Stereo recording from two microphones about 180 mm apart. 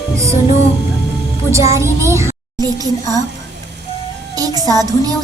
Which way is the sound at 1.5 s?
15° right (ahead or behind).